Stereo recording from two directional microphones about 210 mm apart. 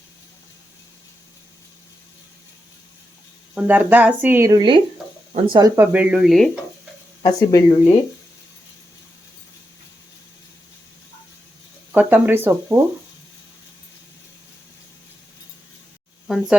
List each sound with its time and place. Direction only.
3.5 s speech: 5° right (ahead or behind)
5.3 s speech: 30° right (ahead or behind)
5.5 s speech: 15° right (ahead or behind)
7.2 s speech: 15° left (ahead or behind)
11.9 s speech: 10° right (ahead or behind)
16.2 s a sound: 5° right (ahead or behind)